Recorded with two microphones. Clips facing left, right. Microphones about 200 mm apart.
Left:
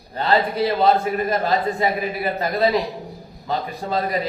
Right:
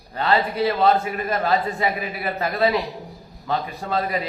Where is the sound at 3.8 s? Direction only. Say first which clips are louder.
Left 2 dB; 30° left (ahead or behind).